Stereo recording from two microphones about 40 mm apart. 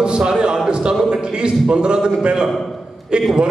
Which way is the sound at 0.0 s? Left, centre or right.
Right.